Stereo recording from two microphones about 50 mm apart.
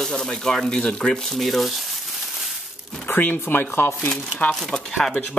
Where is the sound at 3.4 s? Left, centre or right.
Left.